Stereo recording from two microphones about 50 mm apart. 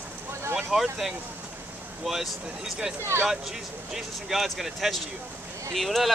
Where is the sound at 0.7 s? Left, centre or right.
Centre.